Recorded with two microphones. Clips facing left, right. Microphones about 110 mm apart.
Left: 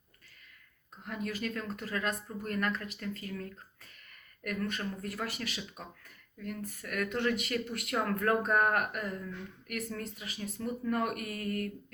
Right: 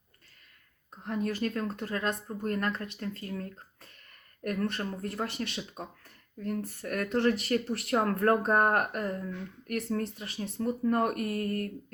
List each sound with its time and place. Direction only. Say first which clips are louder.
1.0 s speech: right 5 dB; 30° right (ahead or behind)